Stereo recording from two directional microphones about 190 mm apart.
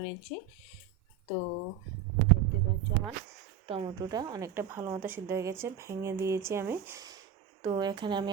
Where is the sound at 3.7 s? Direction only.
25° right (ahead or behind).